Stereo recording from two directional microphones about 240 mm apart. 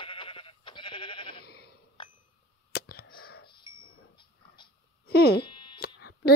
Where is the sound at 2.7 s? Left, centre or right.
Left.